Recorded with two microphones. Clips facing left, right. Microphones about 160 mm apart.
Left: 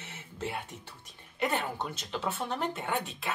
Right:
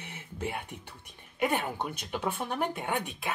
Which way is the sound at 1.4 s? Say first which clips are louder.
Right 2 dB; 15° right (ahead or behind).